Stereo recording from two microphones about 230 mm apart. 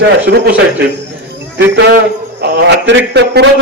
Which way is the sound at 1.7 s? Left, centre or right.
Right.